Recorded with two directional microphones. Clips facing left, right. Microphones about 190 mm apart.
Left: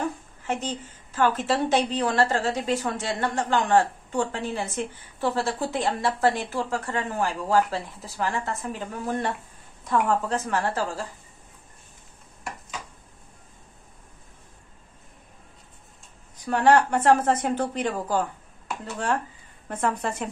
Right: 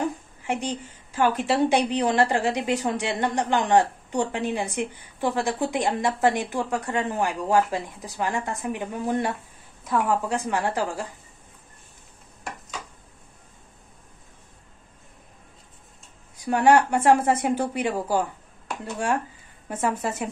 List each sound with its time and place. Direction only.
0.5 s a woman's voice: 10° right (ahead or behind)
16.3 s a woman's voice: 10° right (ahead or behind)
19.7 s a woman's voice: 10° right (ahead or behind)